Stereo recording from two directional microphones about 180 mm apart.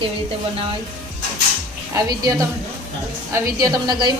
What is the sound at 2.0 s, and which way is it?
Speech, 20° right (ahead or behind).